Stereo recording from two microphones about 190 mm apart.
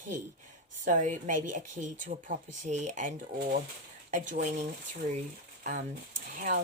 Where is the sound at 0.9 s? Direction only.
40° right (ahead or behind).